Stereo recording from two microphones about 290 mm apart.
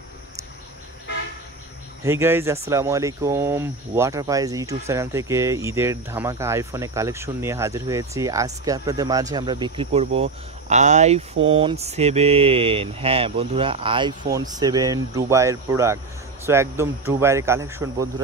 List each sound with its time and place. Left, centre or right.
2.0 s speech: centre